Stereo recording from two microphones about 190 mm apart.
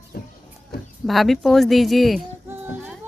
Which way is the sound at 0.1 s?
50° left (ahead or behind).